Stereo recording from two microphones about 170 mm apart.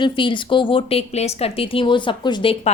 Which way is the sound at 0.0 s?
30° left (ahead or behind).